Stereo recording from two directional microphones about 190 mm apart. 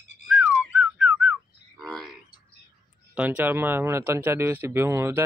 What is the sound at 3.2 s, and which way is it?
Speech, 5° right (ahead or behind).